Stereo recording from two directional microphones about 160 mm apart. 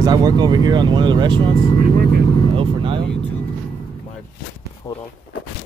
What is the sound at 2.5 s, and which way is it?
Vehicle, 35° right (ahead or behind).